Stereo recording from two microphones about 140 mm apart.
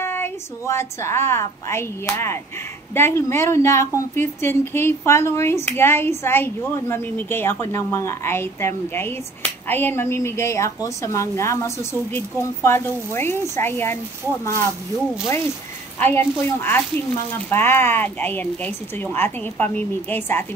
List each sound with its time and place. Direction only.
0.0 s a woman's voice: 15° left (ahead or behind)
16.0 s a woman's voice: 15° left (ahead or behind)